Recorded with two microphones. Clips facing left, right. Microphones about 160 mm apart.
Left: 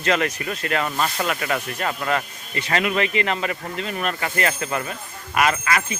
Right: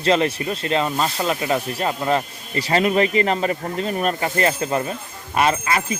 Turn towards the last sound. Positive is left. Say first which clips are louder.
# right 2 dB
turn(degrees=-30)  # may be behind; listen again after turning